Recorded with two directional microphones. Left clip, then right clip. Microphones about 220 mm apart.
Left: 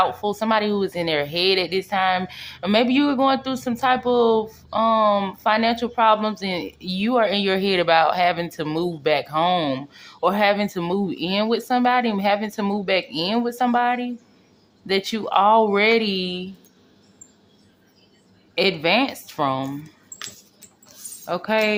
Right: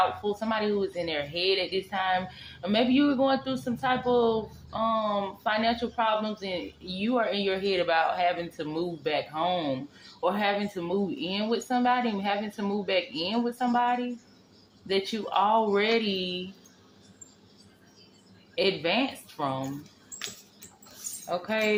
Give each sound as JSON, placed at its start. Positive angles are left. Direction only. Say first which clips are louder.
{"t": 0.0, "sound": "speech", "louder": "left 6 dB", "side_deg": 50}
{"t": 18.5, "sound": "speech", "louder": "left 7 dB", "side_deg": 45}
{"t": 21.2, "sound": "speech", "louder": "left 7 dB", "side_deg": 50}